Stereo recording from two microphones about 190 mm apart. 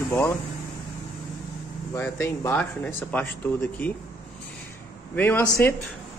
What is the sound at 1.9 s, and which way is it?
A man's voice, 15° left (ahead or behind).